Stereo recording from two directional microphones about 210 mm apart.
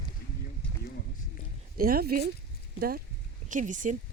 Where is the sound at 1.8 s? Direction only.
45° right (ahead or behind).